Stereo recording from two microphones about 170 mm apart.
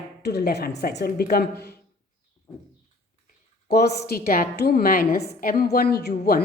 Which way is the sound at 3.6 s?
70° left (ahead or behind).